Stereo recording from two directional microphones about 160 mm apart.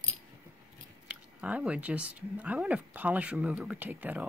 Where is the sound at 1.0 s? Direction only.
10° right (ahead or behind).